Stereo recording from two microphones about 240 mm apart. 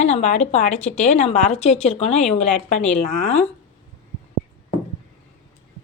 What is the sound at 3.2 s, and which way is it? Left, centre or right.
Speech, left.